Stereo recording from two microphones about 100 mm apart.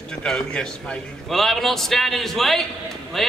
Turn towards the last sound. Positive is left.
turn(degrees=0)  # may be behind; listen again after turning